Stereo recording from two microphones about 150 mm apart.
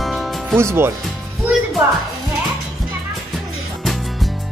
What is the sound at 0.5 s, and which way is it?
Speech, 15° right (ahead or behind).